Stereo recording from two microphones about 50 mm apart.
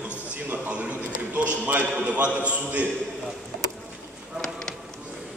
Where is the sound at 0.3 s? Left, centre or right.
Right.